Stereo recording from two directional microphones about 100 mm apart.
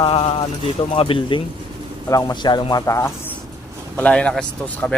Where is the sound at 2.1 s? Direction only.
35° left (ahead or behind).